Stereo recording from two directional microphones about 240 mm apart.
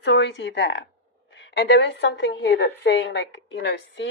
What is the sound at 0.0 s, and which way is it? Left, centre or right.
A woman's voice, left.